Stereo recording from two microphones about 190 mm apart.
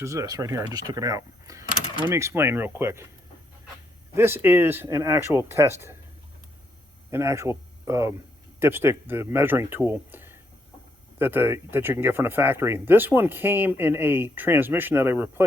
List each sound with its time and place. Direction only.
0.0 s speech: 15° right (ahead or behind)
4.1 s speech: 15° right (ahead or behind)
7.1 s speech: 15° right (ahead or behind)